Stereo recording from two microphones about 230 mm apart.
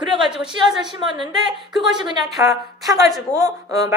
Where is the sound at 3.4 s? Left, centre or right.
Centre.